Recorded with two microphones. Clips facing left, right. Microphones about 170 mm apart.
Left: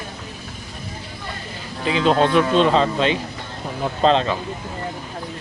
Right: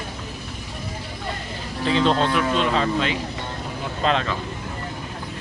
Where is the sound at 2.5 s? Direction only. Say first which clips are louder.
Left 5 dB; 30° left (ahead or behind).